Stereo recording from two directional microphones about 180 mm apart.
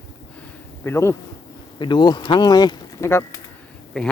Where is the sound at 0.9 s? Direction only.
15° left (ahead or behind).